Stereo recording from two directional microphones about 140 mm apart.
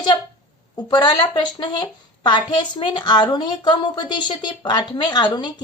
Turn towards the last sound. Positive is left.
turn(degrees=30)  # may be behind; listen again after turning